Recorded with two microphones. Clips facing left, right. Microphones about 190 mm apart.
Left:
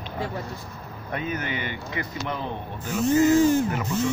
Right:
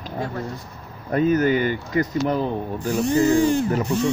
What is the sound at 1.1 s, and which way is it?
Speech, 40° right (ahead or behind).